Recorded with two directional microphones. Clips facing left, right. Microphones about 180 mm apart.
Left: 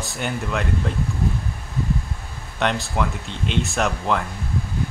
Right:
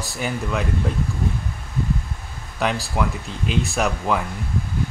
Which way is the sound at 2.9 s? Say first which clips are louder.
Right 1 dB; 5° right (ahead or behind).